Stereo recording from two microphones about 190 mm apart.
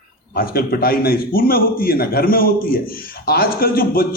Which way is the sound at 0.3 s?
50° left (ahead or behind).